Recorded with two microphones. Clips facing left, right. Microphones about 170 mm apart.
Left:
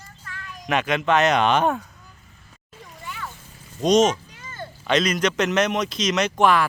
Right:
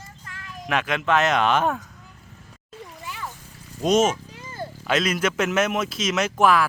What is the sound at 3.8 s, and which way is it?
Speech, 5° right (ahead or behind).